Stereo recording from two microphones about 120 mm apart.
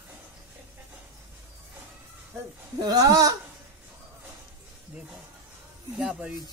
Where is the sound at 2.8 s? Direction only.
30° right (ahead or behind).